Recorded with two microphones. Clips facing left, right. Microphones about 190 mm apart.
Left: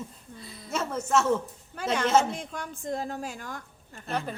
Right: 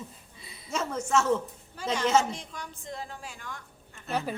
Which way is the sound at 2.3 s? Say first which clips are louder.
Left 4 dB; 50° left (ahead or behind).